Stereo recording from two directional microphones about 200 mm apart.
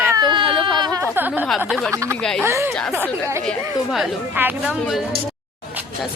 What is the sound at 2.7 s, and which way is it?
Speech, 5° left (ahead or behind).